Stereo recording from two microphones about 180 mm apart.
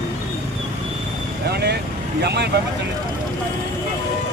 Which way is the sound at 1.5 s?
65° right (ahead or behind).